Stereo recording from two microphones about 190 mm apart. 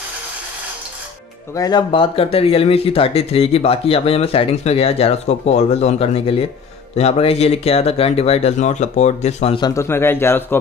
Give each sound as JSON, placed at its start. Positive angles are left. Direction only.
{"t": 1.5, "sound": "speech", "side_deg": 20}